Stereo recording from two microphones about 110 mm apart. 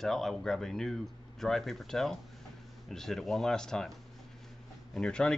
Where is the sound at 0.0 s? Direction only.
Centre (ahead or behind).